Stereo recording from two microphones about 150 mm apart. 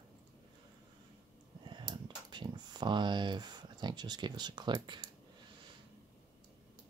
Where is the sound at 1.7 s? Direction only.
30° right (ahead or behind).